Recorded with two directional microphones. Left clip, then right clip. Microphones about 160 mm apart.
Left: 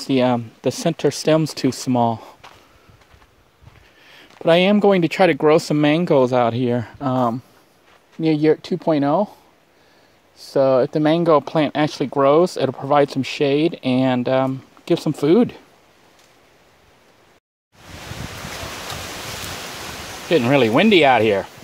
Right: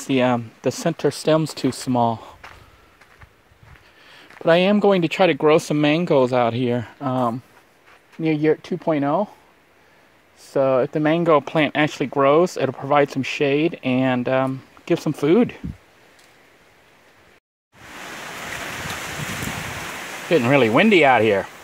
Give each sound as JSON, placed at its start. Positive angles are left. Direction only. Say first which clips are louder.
{"t": 0.0, "sound": "speech", "louder": "left 1 dB", "side_deg": 20}
{"t": 4.0, "sound": "speech", "louder": "left 1 dB", "side_deg": 10}
{"t": 10.4, "sound": "speech", "louder": "left 3 dB", "side_deg": 20}
{"t": 20.2, "sound": "speech", "louder": "left 1 dB", "side_deg": 10}